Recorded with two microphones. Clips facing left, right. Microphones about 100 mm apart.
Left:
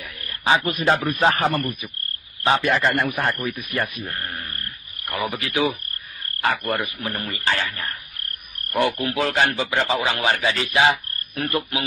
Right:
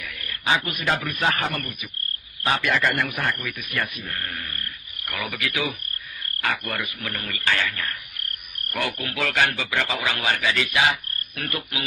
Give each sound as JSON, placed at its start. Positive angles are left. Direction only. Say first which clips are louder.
{"t": 0.0, "sound": "a man's voice", "louder": "left 3 dB", "side_deg": 30}